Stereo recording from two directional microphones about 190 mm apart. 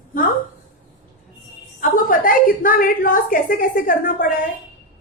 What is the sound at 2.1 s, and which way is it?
A woman's voice, 45° left (ahead or behind).